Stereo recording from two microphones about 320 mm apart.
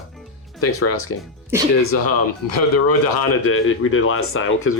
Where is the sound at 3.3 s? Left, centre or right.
Left.